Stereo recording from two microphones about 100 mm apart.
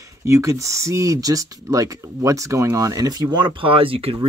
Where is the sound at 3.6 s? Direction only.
65° right (ahead or behind).